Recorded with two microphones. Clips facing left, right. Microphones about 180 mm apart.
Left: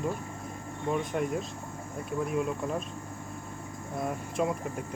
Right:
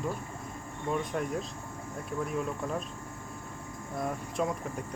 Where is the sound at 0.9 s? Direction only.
Centre (ahead or behind).